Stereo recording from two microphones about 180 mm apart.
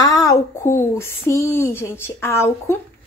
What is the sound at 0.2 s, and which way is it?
Speech, 15° left (ahead or behind).